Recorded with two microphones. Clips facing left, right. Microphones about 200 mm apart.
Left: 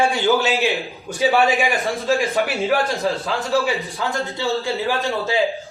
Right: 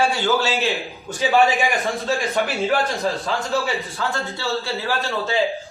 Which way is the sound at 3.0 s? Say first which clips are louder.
Left 1 dB; 15° right (ahead or behind).